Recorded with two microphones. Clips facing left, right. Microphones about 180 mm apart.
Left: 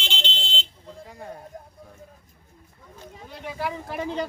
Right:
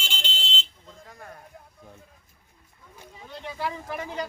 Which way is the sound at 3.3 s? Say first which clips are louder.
Left 1 dB; 10° left (ahead or behind).